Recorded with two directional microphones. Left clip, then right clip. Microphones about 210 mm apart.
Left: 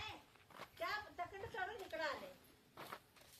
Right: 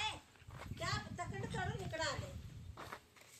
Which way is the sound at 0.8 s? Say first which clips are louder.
Right 1 dB; 50° right (ahead or behind).